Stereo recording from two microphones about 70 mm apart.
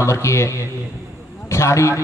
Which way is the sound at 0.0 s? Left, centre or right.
Left.